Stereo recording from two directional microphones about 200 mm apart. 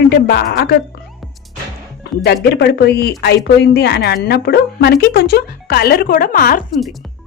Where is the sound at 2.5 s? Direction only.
55° left (ahead or behind).